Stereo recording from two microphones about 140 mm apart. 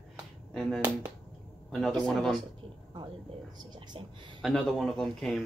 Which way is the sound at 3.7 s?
30° right (ahead or behind).